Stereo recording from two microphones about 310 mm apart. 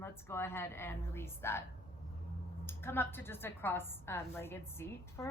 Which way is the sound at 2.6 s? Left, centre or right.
Centre.